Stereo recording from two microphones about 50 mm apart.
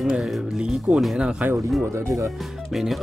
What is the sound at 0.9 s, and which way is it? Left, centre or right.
Speech, centre.